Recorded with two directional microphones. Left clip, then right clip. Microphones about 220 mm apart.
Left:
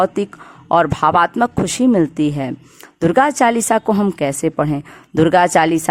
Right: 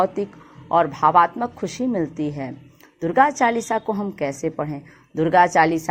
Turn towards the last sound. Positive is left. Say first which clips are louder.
# left 3 dB
turn(degrees=35)  # may be behind; listen again after turning